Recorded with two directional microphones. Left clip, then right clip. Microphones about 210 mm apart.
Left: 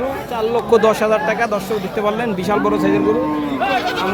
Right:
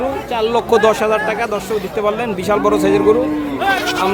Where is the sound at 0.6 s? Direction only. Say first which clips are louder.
Left 1 dB; 5° right (ahead or behind).